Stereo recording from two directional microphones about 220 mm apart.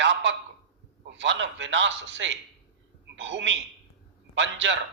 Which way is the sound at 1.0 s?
55° right (ahead or behind).